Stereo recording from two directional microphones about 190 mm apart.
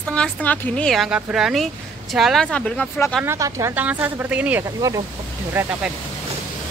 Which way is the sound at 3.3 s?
15° right (ahead or behind).